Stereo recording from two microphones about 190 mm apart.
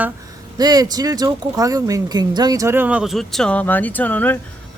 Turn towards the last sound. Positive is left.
turn(degrees=10)  # may be behind; listen again after turning